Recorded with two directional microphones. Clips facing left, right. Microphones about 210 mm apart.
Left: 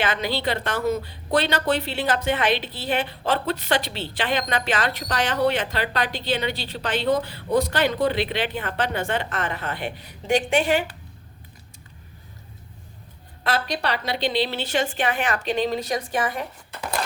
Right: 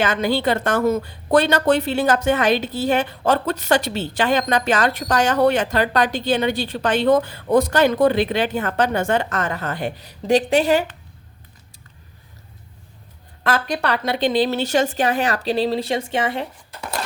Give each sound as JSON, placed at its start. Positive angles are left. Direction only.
{"t": 0.0, "sound": "a woman's voice", "side_deg": -45}
{"t": 13.4, "sound": "a woman's voice", "side_deg": -50}